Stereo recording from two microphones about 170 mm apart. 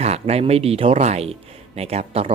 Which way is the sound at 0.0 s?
40° right (ahead or behind).